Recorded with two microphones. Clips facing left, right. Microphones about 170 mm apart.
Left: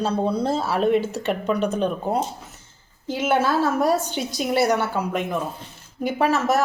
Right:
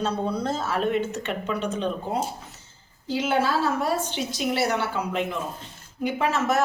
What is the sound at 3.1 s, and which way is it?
A woman's voice, 50° left (ahead or behind).